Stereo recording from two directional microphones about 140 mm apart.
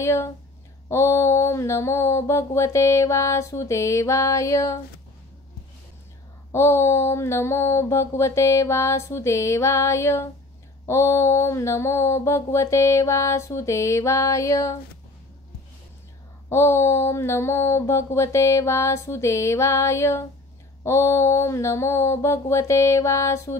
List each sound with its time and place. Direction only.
0.0 s mantra: 20° left (ahead or behind)
6.5 s mantra: 20° left (ahead or behind)
16.4 s mantra: 20° left (ahead or behind)